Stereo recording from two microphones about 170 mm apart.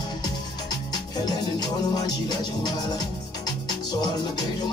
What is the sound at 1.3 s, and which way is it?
Music, 25° left (ahead or behind).